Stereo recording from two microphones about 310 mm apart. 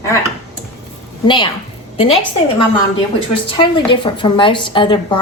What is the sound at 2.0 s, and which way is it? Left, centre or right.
Speech, centre.